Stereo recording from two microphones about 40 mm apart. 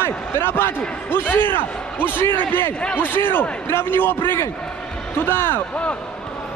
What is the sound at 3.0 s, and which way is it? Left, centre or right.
Speech, left.